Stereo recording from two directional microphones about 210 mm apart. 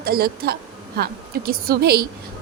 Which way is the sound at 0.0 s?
45° right (ahead or behind).